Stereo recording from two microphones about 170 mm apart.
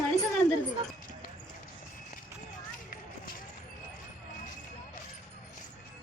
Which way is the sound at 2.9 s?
55° left (ahead or behind).